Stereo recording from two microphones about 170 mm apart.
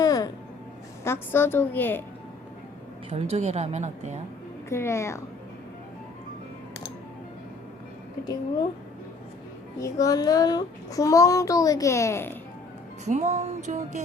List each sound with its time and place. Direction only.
0.0 s a sound: 20° left (ahead or behind)
1.0 s a woman's voice: 15° left (ahead or behind)
3.1 s a woman's voice: 40° right (ahead or behind)
4.7 s a woman's voice: 15° left (ahead or behind)
9.8 s child singing: 20° left (ahead or behind)
13.1 s music: 40° right (ahead or behind)